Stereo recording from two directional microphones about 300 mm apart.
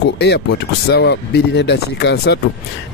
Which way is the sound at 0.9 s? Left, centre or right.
Left.